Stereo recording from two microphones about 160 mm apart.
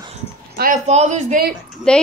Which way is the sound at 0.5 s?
55° right (ahead or behind).